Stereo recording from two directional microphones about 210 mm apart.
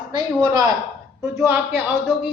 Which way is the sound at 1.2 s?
5° right (ahead or behind).